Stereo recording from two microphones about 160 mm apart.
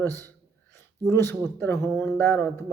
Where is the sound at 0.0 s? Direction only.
15° left (ahead or behind).